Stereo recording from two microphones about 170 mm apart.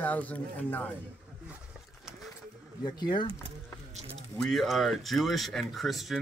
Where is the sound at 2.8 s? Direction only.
25° left (ahead or behind).